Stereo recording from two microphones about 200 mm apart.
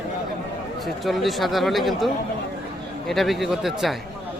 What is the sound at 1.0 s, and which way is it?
Speech, centre (ahead or behind).